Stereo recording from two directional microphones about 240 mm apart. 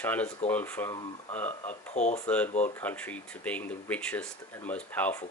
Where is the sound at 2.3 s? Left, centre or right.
Centre.